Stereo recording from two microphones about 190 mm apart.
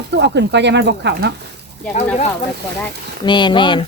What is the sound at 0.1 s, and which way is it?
Speech, 65° right (ahead or behind).